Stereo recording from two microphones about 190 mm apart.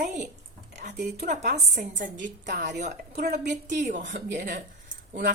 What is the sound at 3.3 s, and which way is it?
Speech, 65° right (ahead or behind).